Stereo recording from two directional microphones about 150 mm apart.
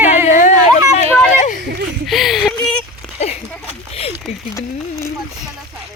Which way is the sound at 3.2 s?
45° left (ahead or behind).